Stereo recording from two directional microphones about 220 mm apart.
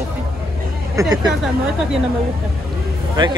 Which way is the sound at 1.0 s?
15° right (ahead or behind).